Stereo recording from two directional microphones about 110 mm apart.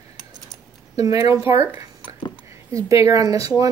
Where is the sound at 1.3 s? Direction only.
25° right (ahead or behind).